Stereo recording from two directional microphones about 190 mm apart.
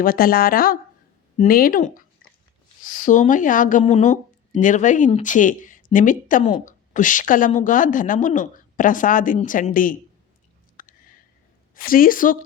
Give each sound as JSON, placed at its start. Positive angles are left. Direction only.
{"t": 0.0, "sound": "speech", "side_deg": 50}
{"t": 10.8, "sound": "a sound", "side_deg": 45}
{"t": 11.7, "sound": "speech", "side_deg": 50}